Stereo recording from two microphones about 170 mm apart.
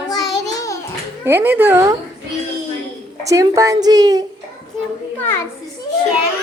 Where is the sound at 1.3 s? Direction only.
15° right (ahead or behind).